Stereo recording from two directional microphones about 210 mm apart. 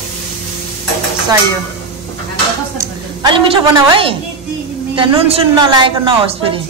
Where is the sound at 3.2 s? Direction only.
25° right (ahead or behind).